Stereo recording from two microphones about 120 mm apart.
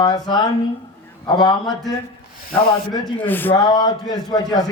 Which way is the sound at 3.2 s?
15° left (ahead or behind).